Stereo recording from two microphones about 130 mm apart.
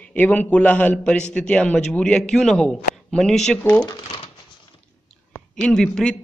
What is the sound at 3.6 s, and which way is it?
Speech, 20° left (ahead or behind).